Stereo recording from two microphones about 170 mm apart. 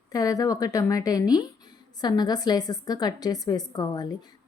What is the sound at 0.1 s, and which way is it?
Speech, 20° left (ahead or behind).